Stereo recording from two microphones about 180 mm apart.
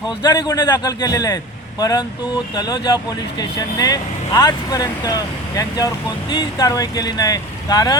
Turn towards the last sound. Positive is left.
turn(degrees=20)  # may be behind; listen again after turning